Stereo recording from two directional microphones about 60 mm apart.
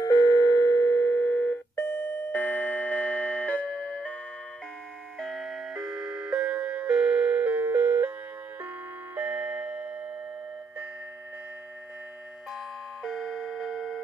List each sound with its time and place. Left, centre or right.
0.0 s a sound: left
5.2 s clock: centre; by 8.1 s right
9.1 s doorbell: right
13.0 s music: centre